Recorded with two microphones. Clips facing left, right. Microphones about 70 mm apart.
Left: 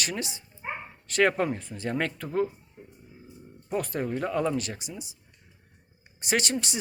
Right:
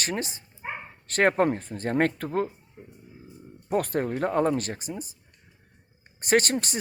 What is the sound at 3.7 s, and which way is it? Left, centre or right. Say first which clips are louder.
Speech: right 3 dB; right.